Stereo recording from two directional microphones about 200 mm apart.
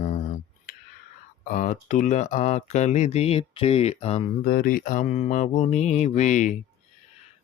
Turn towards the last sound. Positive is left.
turn(degrees=35)  # may be behind; listen again after turning